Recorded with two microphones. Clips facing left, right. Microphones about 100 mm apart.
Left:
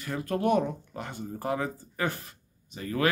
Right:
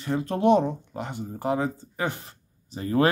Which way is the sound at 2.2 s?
30° right (ahead or behind).